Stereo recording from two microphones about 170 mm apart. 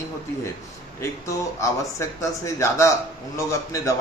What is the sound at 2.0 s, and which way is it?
A man's voice, 15° left (ahead or behind).